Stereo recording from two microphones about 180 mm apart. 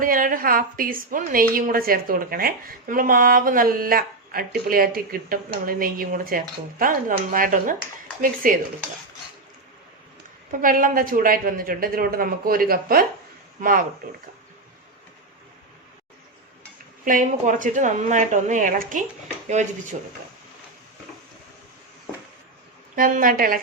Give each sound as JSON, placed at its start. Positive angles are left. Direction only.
{"t": 0.0, "sound": "a woman's voice", "side_deg": -50}
{"t": 10.6, "sound": "a woman's voice", "side_deg": -50}
{"t": 17.1, "sound": "a woman's voice", "side_deg": -45}
{"t": 23.0, "sound": "a woman's voice", "side_deg": -50}